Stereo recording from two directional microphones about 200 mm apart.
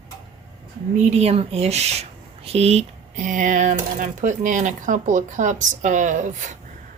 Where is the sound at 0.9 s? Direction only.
35° right (ahead or behind).